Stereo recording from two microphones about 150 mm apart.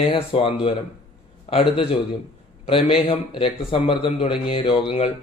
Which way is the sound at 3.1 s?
35° left (ahead or behind).